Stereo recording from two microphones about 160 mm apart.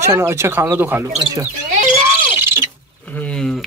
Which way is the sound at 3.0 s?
10° left (ahead or behind).